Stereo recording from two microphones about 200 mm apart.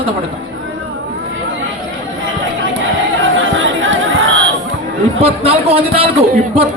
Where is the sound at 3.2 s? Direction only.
70° right (ahead or behind).